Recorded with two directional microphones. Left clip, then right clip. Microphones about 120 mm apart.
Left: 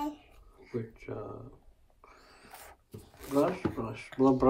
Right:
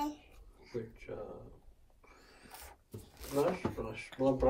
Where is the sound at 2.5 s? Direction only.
15° left (ahead or behind).